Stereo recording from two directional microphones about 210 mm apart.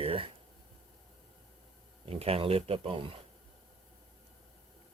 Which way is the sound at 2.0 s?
30° right (ahead or behind).